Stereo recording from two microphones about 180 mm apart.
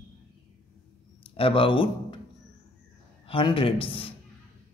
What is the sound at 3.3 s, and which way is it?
Speech, 30° left (ahead or behind).